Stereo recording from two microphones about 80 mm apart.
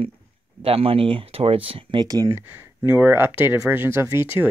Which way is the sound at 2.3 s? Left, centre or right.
Right.